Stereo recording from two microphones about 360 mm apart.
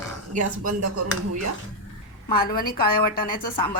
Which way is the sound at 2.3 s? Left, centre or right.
Left.